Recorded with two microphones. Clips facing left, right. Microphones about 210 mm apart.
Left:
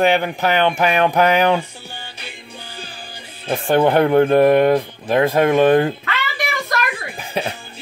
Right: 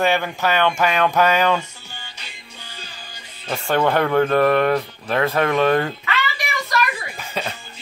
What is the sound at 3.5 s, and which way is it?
Speech, 15° left (ahead or behind).